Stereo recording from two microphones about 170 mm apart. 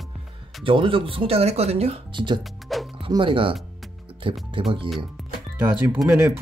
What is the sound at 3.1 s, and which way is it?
Speech, 30° right (ahead or behind).